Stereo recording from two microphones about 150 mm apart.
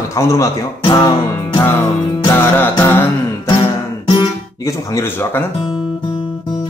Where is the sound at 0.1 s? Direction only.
20° left (ahead or behind).